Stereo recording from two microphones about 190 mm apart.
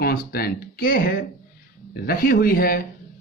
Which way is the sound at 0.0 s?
50° left (ahead or behind).